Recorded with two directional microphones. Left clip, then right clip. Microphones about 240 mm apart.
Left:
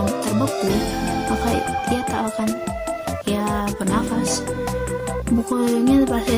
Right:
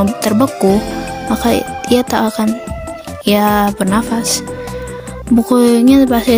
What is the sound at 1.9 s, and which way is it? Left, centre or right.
A woman's voice, right.